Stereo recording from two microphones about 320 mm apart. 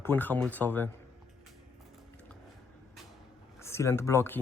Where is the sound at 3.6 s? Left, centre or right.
Centre.